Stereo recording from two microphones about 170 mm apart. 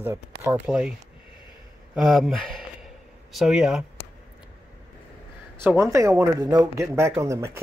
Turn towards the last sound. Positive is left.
turn(degrees=-15)  # may be behind; listen again after turning